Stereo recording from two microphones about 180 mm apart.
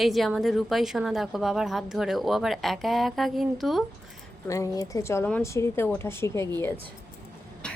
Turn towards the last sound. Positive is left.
turn(degrees=5)  # may be behind; listen again after turning